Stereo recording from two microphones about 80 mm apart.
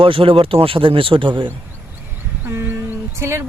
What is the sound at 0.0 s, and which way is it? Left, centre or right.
Speech, right.